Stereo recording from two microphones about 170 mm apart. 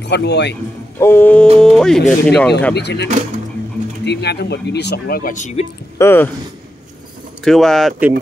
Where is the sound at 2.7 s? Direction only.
80° left.